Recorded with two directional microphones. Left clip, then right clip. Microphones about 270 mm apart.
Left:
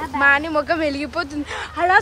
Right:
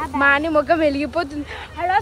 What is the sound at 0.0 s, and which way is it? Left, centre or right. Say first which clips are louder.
A woman's voice: even; centre.